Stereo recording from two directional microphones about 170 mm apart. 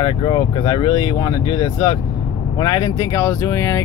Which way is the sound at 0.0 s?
30° left (ahead or behind).